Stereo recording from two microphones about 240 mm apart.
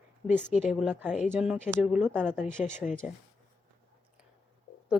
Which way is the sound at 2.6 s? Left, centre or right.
Left.